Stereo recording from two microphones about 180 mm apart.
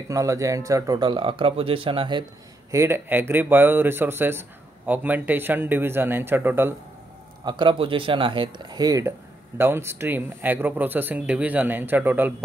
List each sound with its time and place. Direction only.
0.1 s speech: 15° right (ahead or behind)
2.7 s speech: 15° right (ahead or behind)
7.4 s speech: 25° right (ahead or behind); by 12.4 s 10° right (ahead or behind)